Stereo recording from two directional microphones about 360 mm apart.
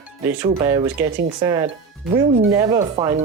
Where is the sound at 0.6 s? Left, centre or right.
Centre.